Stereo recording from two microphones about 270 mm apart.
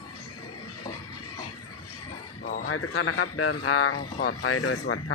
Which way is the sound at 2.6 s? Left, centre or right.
Left.